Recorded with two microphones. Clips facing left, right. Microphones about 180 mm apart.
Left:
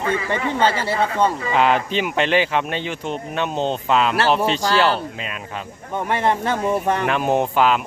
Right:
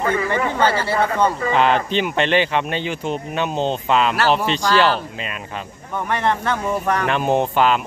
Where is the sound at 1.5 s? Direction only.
5° left (ahead or behind).